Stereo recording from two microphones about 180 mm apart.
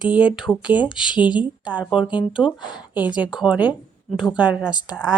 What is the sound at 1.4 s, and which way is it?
Speech, 5° right (ahead or behind).